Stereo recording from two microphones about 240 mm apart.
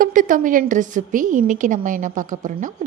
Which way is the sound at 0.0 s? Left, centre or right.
Right.